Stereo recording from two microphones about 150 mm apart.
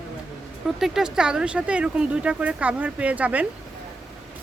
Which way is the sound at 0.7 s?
Centre (ahead or behind).